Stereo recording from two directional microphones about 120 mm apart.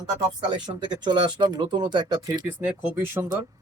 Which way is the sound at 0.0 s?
35° right (ahead or behind).